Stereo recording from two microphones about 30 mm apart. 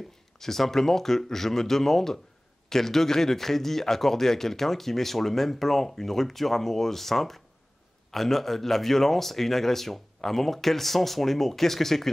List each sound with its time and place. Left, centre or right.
0.4 s speech: centre